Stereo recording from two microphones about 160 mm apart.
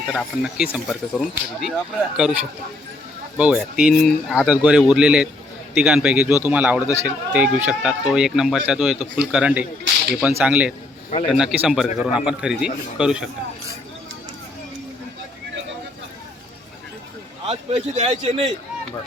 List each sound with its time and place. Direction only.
0.1 s a man's voice: 5° right (ahead or behind)
17.4 s a man's voice: 40° right (ahead or behind)